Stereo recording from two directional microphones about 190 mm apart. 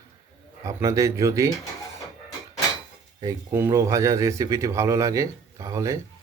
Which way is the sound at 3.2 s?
15° right (ahead or behind).